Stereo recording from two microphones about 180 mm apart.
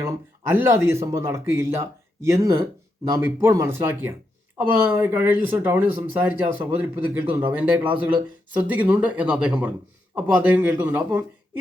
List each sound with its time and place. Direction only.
0.5 s speech: 10° right (ahead or behind)